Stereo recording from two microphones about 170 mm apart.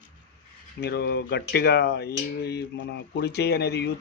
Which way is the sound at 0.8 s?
70° left (ahead or behind).